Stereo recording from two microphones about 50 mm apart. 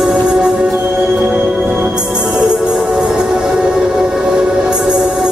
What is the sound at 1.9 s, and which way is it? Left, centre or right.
Music, centre.